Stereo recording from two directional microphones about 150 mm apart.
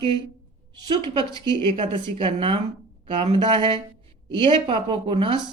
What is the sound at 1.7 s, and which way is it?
A woman's voice, 35° right (ahead or behind).